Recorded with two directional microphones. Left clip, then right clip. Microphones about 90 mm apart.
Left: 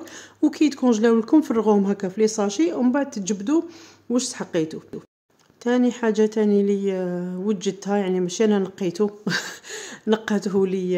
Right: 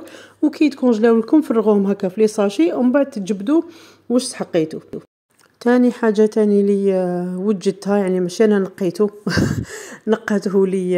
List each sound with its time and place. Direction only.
0.0 s a woman's voice: 20° right (ahead or behind)
5.8 s speech: 85° right; by 8.2 s 65° right (ahead or behind)
8.3 s speech: 55° right (ahead or behind)